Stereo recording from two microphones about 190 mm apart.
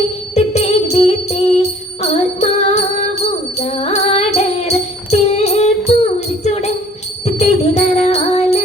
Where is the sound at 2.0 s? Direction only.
35° left (ahead or behind).